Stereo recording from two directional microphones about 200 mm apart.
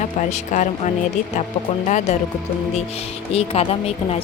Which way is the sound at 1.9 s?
35° left (ahead or behind).